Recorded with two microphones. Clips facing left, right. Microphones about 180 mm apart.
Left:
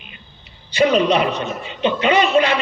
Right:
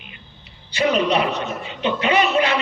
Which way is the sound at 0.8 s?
20° left (ahead or behind).